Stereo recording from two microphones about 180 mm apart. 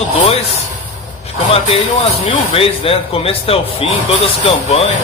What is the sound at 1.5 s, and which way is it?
Speech, 35° left (ahead or behind).